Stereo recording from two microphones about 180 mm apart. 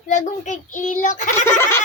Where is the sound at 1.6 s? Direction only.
15° left (ahead or behind).